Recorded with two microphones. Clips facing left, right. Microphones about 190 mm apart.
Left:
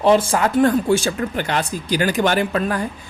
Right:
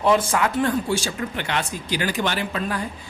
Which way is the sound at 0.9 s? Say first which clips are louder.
Left 7 dB; 55° left (ahead or behind).